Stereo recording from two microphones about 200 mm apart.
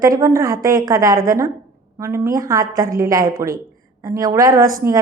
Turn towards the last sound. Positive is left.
turn(degrees=-15)  # may be behind; listen again after turning